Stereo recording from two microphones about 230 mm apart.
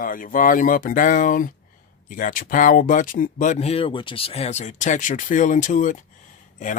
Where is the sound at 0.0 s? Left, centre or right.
Left.